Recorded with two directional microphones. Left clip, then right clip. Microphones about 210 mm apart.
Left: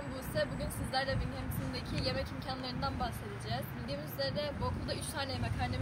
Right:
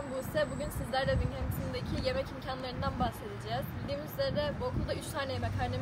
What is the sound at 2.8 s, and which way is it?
Speech, 10° right (ahead or behind).